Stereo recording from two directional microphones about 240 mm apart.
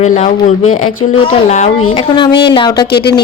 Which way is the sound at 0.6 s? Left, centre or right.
Left.